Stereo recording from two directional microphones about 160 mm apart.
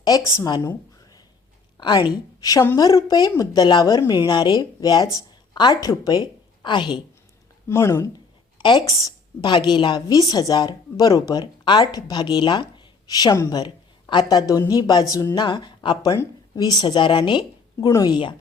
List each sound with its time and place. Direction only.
0.0 s a woman's voice: 25° left (ahead or behind)
7.7 s speech: 15° left (ahead or behind)
8.5 s a woman's voice: 25° left (ahead or behind)